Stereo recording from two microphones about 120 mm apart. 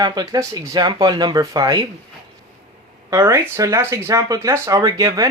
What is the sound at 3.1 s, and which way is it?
Speech, 25° right (ahead or behind).